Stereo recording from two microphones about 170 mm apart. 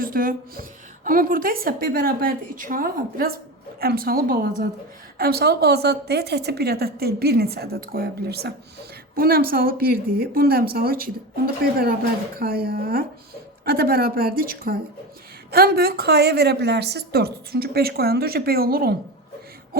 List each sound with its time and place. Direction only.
0.0 s a woman's voice: 55° right (ahead or behind)